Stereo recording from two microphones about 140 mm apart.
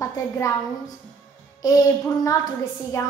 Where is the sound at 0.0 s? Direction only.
20° left (ahead or behind).